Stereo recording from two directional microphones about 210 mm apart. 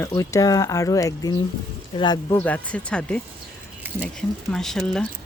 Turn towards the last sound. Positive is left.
turn(degrees=0)  # may be behind; listen again after turning